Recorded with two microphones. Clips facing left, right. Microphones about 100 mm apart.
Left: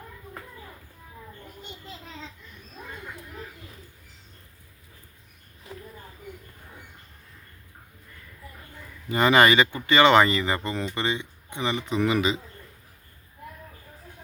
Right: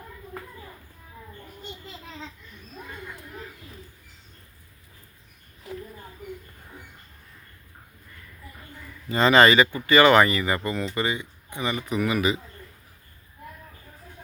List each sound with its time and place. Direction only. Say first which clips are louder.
9.0 s speech: right 1 dB; 15° left (ahead or behind)